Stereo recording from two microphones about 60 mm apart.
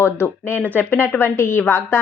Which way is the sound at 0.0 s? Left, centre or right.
Left.